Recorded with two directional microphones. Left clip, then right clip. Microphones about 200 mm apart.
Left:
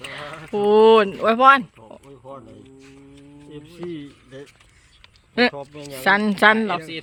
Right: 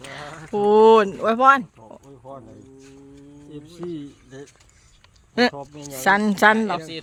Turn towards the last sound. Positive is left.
turn(degrees=-5)  # may be behind; listen again after turning